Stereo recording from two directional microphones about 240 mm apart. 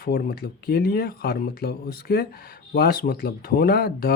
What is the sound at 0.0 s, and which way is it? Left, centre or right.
Speech, left.